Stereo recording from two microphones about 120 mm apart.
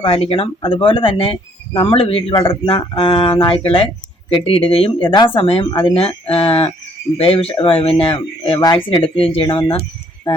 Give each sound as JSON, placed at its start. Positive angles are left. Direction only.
{"t": 0.0, "sound": "speech", "side_deg": 50}